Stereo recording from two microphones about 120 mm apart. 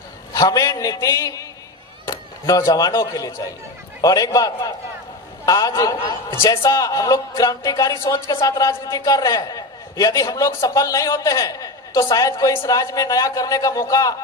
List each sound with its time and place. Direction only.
0.3 s a man's voice: 30° left (ahead or behind)